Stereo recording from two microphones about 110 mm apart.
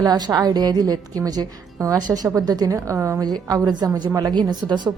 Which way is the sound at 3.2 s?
40° right (ahead or behind).